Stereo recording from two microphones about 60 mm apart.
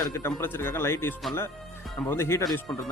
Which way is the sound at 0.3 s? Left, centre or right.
Left.